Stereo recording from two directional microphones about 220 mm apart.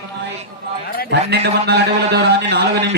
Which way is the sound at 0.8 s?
45° left (ahead or behind).